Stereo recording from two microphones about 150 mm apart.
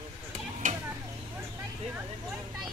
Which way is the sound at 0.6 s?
60° right (ahead or behind).